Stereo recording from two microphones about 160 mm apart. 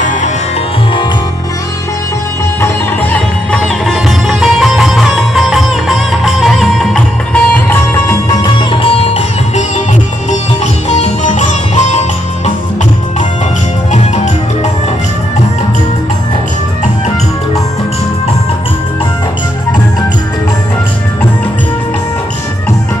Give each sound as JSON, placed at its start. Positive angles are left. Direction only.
{"t": 2.6, "sound": "music", "side_deg": 10}
{"t": 13.9, "sound": "music", "side_deg": 45}